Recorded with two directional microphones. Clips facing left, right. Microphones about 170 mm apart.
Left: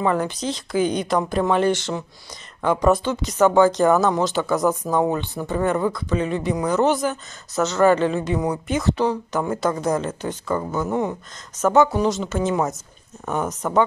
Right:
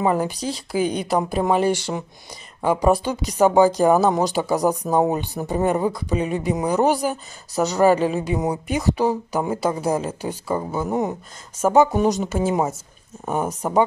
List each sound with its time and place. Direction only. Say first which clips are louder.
0.0 s speech: right 1 dB; 10° right (ahead or behind)
4.5 s speech: right 1 dB; 35° right (ahead or behind)
5.5 s speech: right 1 dB; 15° right (ahead or behind)